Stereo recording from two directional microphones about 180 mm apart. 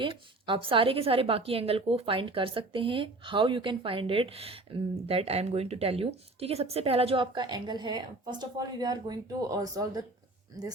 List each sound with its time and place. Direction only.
0.0 s a woman's voice: 30° right (ahead or behind)